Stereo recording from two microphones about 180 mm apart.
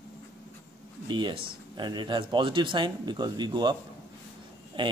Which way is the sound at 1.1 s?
25° right (ahead or behind).